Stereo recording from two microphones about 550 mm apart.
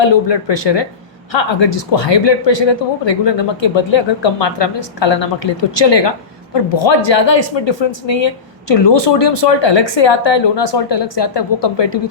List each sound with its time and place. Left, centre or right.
0.0 s speech: left